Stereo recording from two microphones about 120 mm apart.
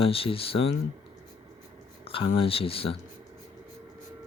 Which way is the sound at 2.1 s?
50° left (ahead or behind).